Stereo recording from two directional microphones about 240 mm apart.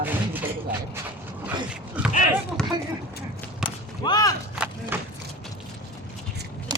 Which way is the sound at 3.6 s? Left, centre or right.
Centre.